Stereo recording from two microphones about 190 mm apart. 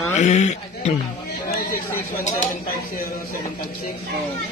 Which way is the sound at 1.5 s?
50° left (ahead or behind).